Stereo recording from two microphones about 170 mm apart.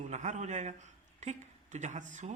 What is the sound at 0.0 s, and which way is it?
A man's voice, 45° right (ahead or behind).